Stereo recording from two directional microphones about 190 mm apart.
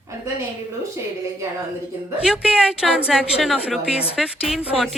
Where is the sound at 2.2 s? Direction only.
5° right (ahead or behind).